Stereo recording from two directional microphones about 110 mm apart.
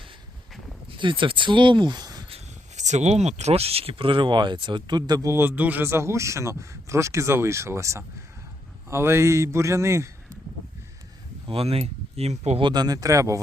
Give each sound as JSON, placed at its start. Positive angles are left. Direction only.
{"t": 0.9, "sound": "speech", "side_deg": -50}
{"t": 2.3, "sound": "speech", "side_deg": -90}
{"t": 5.3, "sound": "speech", "side_deg": -20}
{"t": 11.4, "sound": "speech", "side_deg": -60}
{"t": 12.6, "sound": "speech", "side_deg": -40}